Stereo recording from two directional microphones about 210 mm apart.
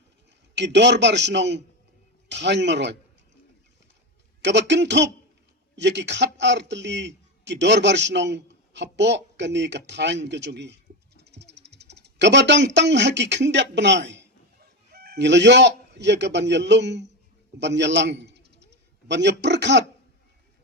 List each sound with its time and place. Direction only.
0.5 s a man's voice: 55° right (ahead or behind)
4.4 s a man's voice: 55° right (ahead or behind)
17.6 s a sound: 55° right (ahead or behind)